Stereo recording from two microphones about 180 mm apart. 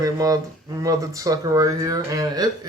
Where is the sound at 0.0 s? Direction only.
20° right (ahead or behind).